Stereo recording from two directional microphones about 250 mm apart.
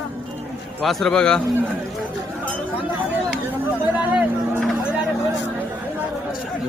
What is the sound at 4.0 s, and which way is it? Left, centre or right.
Vehicle, centre.